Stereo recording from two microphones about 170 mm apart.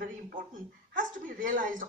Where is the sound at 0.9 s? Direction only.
50° right (ahead or behind).